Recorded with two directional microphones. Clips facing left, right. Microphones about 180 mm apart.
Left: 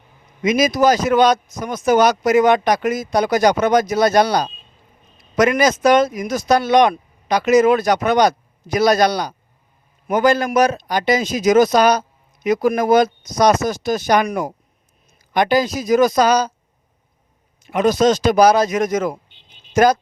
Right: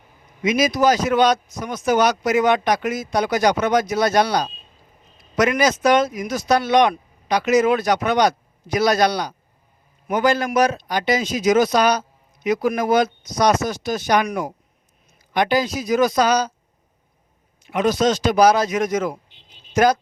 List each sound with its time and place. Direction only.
0.4 s a man's voice: 45° left (ahead or behind)
15.3 s a man's voice: 40° left (ahead or behind)
17.6 s a man's voice: 45° left (ahead or behind)